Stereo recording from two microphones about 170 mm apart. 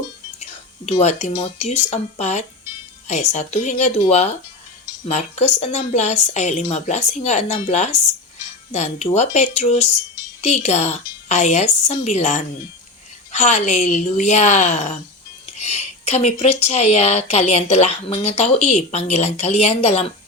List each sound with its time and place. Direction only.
0.9 s a woman's voice: 40° left (ahead or behind)